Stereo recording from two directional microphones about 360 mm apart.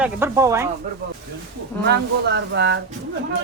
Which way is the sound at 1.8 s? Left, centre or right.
Right.